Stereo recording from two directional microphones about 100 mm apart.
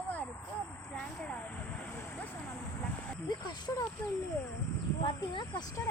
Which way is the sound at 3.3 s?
45° left (ahead or behind).